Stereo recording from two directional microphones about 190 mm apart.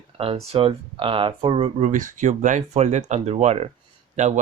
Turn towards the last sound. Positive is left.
turn(degrees=-35)  # may be behind; listen again after turning